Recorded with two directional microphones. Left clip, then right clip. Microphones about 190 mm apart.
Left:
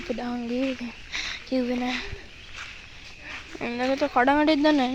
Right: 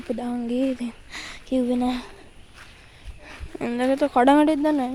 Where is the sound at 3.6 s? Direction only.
40° right (ahead or behind).